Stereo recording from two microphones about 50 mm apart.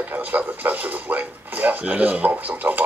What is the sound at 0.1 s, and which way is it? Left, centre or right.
Speech, right.